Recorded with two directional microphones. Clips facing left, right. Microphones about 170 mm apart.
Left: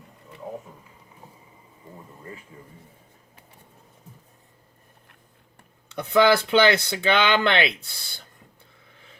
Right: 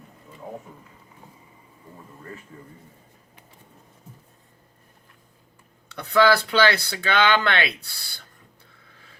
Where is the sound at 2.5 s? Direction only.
10° left (ahead or behind).